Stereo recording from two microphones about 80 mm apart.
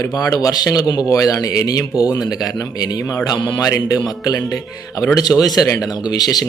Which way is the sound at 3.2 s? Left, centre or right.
Left.